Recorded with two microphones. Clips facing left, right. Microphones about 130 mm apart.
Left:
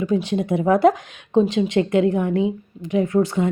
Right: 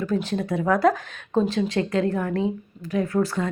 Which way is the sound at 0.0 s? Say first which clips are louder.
Left 4 dB; 15° left (ahead or behind).